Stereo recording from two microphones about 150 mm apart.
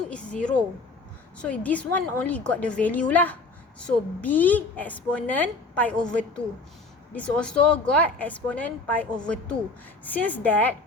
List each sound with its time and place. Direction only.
0.1 s a woman's voice: 10° left (ahead or behind)